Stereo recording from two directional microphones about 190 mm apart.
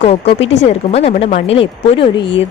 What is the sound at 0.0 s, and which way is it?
Speech, 30° left (ahead or behind).